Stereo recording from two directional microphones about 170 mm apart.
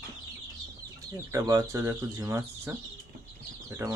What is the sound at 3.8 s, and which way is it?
Speech, 15° right (ahead or behind).